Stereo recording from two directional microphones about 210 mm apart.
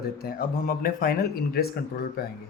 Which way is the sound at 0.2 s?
45° left (ahead or behind).